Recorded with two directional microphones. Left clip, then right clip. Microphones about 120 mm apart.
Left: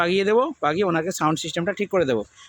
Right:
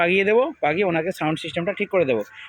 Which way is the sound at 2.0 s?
45° left (ahead or behind).